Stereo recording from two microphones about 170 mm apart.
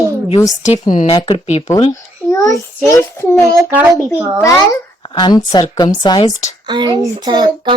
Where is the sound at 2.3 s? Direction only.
20° left (ahead or behind).